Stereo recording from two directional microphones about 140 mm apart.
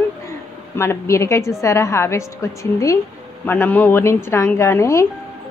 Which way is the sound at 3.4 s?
15° left (ahead or behind).